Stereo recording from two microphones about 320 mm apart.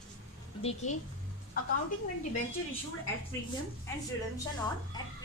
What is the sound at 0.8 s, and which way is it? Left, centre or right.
Speech, left.